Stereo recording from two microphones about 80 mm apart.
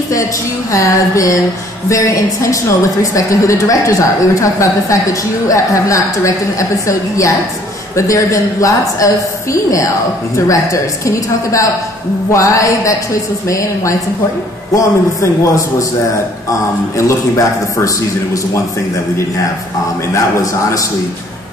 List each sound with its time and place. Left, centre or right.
0.1 s a woman's voice: left